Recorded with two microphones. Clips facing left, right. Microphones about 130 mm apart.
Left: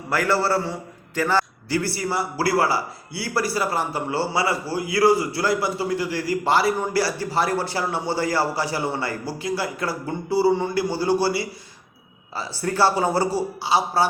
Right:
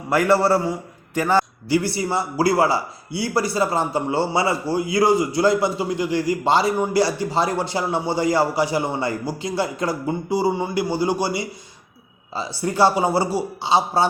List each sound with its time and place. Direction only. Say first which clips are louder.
0.1 s a man's voice: right 4 dB; 20° right (ahead or behind)